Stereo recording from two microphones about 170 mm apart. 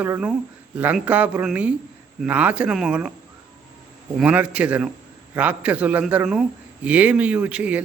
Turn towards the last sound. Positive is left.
turn(degrees=-5)  # may be behind; listen again after turning